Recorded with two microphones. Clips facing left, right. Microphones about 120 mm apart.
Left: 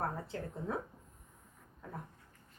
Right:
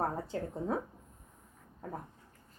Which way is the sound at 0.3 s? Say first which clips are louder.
Right 5 dB; 30° right (ahead or behind).